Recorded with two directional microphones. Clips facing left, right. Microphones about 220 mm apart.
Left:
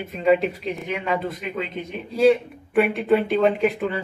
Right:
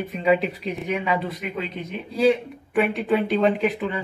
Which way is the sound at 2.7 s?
Centre (ahead or behind).